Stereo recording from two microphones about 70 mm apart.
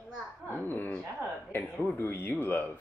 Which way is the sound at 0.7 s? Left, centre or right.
Left.